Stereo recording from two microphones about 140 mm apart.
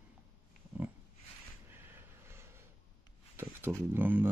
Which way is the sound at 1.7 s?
15° right (ahead or behind).